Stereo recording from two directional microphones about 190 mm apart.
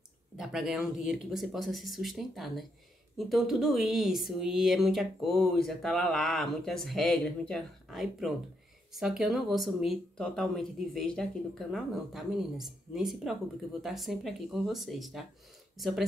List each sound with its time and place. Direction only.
0.4 s speech: centre (ahead or behind)